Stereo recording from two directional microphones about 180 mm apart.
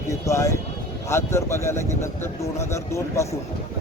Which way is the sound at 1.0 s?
15° left (ahead or behind).